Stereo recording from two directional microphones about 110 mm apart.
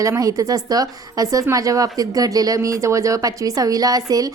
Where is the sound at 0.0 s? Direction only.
30° right (ahead or behind).